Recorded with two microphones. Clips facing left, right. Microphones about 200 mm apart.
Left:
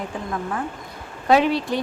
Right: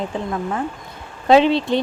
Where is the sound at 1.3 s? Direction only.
25° right (ahead or behind).